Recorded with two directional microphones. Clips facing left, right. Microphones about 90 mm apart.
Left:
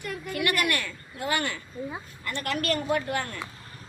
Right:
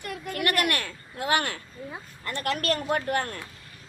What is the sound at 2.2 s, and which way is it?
A woman's voice, 40° right (ahead or behind).